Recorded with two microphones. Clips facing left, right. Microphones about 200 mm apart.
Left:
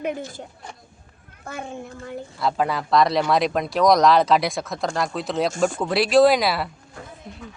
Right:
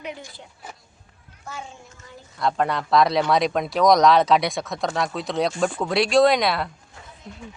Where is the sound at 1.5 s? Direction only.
55° left (ahead or behind).